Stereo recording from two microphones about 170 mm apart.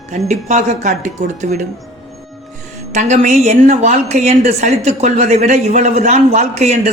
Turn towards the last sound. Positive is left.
turn(degrees=-40)  # may be behind; listen again after turning